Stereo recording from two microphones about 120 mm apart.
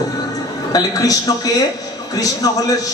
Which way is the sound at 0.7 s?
30° left (ahead or behind).